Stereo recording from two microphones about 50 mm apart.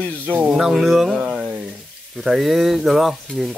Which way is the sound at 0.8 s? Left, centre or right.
Centre.